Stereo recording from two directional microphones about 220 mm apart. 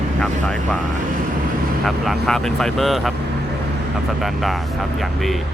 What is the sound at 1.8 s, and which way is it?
Speech, centre (ahead or behind).